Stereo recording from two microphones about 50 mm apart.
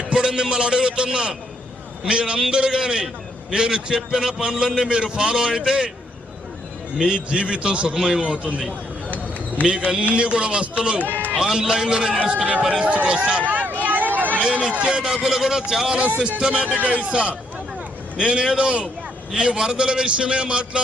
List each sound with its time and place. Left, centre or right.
0.0 s a man's voice: centre
7.0 s a man's voice: centre
9.0 s a sound: left
9.6 s a man's voice: centre
11.3 s a man's voice: centre
12.5 s a man's voice: right
13.8 s a sound: right
14.7 s a man's voice: right
14.9 s a man's voice: centre
16.7 s a man's voice: right
17.1 s a man's voice: centre